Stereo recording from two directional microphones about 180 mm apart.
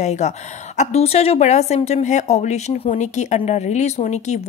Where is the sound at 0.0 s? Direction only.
40° left (ahead or behind).